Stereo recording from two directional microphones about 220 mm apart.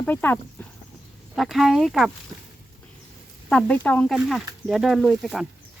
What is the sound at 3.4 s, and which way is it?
Speech, 5° left (ahead or behind).